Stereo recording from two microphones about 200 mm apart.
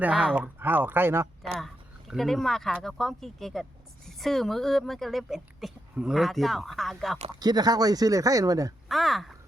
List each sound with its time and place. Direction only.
0.0 s speech: 5° right (ahead or behind)
1.5 s speech: centre (ahead or behind)
7.2 s speech: 20° right (ahead or behind)
8.9 s speech: centre (ahead or behind)